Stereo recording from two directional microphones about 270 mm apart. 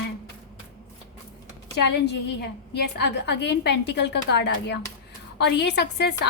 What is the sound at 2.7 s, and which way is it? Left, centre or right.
A woman's voice, left.